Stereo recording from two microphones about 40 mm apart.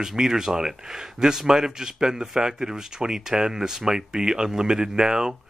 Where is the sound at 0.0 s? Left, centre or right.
Centre.